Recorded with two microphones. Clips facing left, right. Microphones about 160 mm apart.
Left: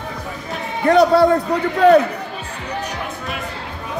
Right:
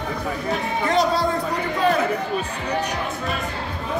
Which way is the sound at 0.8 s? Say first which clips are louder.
Left 9 dB; 60° left (ahead or behind).